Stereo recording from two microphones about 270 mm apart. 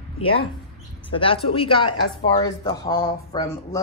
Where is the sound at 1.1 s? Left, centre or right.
Centre.